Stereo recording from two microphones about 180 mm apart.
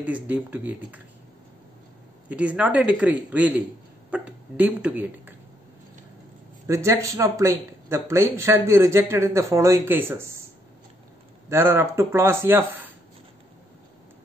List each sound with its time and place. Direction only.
0.0 s speech: 10° right (ahead or behind)
2.2 s speech: 5° right (ahead or behind)
6.7 s speech: 15° right (ahead or behind)
11.4 s speech: 15° right (ahead or behind)